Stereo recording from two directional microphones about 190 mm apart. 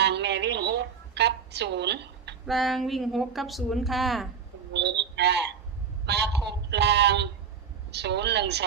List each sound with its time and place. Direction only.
0.0 s a sound: 65° right (ahead or behind)
2.5 s a woman's voice: centre (ahead or behind)
4.7 s a woman's voice: 65° right (ahead or behind)